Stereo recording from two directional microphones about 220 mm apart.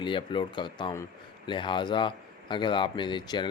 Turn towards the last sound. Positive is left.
turn(degrees=20)  # may be behind; listen again after turning